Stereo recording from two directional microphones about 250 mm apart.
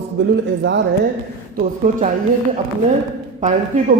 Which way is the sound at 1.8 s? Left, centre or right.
Right.